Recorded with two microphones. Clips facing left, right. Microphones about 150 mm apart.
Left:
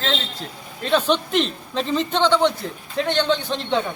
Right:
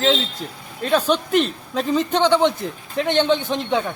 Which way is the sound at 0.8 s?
5° right (ahead or behind).